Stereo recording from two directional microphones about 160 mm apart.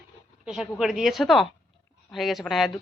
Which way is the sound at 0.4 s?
5° right (ahead or behind).